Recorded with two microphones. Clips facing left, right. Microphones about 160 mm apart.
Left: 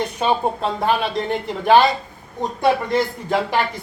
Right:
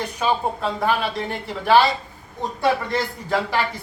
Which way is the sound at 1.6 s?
20° left (ahead or behind).